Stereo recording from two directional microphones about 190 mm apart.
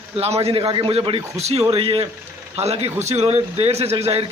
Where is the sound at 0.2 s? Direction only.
30° right (ahead or behind).